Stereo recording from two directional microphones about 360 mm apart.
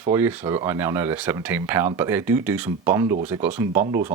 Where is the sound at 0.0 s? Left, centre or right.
Centre.